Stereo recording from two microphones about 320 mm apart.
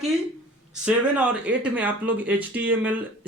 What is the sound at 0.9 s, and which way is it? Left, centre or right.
Speech, centre.